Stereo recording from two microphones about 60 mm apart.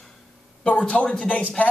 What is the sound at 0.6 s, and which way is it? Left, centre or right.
Speech, left.